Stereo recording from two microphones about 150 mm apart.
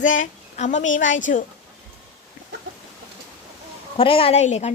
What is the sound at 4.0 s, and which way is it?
Speech, 40° left (ahead or behind).